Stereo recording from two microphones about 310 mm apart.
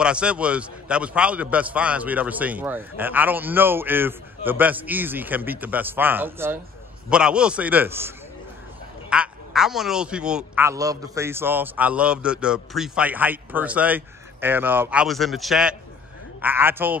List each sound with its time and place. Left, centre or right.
0.0 s a man's voice: centre
9.1 s a man's voice: centre